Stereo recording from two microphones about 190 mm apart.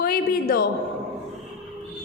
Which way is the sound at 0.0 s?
50° left (ahead or behind).